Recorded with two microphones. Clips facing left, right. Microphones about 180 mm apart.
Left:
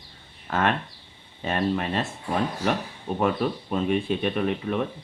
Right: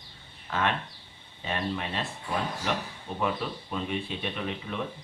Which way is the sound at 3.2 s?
50° left (ahead or behind).